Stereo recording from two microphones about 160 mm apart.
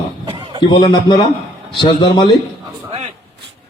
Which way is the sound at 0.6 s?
25° left (ahead or behind).